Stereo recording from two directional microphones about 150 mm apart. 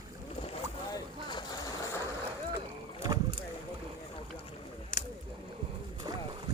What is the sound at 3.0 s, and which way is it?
Boat, 25° right (ahead or behind).